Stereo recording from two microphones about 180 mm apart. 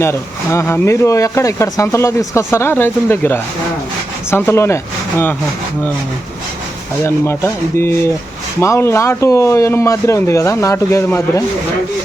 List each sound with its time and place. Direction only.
0.0 s speech: 15° left (ahead or behind)
7.0 s speech: 15° left (ahead or behind)